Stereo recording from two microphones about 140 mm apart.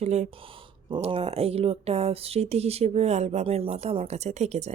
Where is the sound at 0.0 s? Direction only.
55° right (ahead or behind).